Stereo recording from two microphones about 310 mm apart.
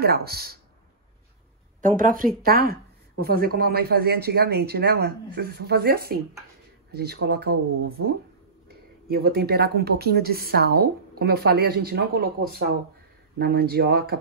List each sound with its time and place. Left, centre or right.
0.0 s speech: right
1.8 s speech: right